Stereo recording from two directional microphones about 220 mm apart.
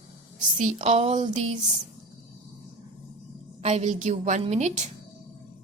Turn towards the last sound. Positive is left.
turn(degrees=-30)  # may be behind; listen again after turning